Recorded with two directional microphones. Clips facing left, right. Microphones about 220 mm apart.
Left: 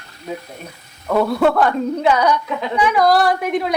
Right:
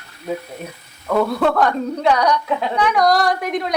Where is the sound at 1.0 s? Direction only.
5° left (ahead or behind).